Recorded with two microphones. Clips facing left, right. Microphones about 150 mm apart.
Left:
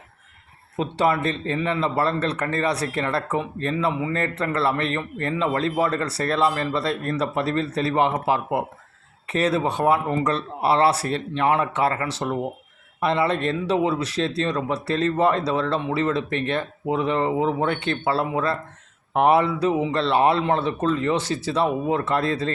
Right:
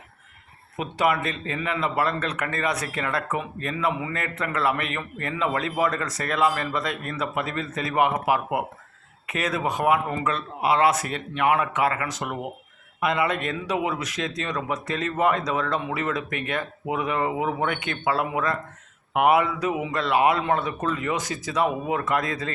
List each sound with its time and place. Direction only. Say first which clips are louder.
0.8 s speech: left 2 dB; 30° left (ahead or behind)